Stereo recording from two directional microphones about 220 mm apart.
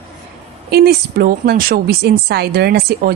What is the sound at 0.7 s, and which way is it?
Speech, 45° right (ahead or behind).